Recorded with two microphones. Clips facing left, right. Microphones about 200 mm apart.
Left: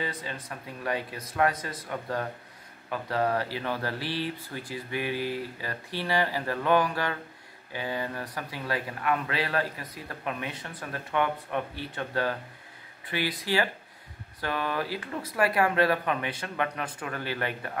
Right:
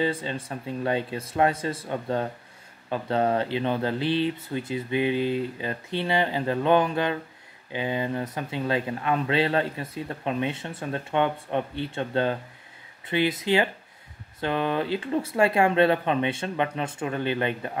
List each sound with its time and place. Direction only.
0.0 s speech: 25° right (ahead or behind)